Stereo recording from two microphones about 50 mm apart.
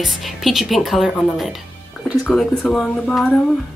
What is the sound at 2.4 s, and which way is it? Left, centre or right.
Speech, centre.